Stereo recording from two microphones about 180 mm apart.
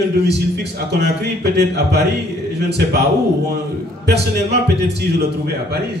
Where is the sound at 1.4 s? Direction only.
65° right (ahead or behind).